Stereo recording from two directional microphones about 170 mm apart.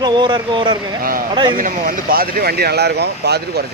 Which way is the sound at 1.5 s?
50° right (ahead or behind).